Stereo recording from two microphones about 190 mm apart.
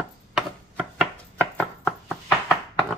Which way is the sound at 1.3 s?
10° left (ahead or behind).